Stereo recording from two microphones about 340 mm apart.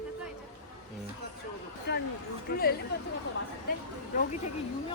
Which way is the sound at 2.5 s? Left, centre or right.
Left.